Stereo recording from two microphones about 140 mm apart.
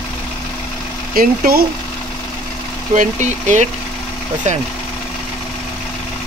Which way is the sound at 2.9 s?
60° right (ahead or behind).